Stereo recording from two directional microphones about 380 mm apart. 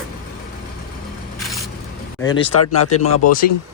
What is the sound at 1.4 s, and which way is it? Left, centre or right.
Squish, centre.